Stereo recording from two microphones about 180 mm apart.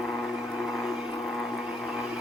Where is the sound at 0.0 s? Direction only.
Centre (ahead or behind).